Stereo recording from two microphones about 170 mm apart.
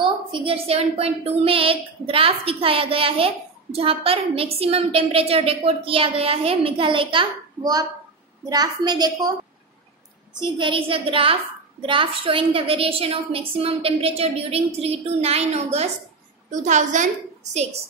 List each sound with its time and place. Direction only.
0.0 s a woman's voice: 30° right (ahead or behind)
10.4 s a woman's voice: 30° right (ahead or behind); by 17.1 s 45° right (ahead or behind)